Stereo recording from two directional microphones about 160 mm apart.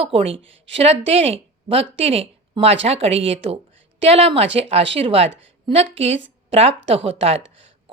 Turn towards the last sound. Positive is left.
turn(degrees=-35)  # may be behind; listen again after turning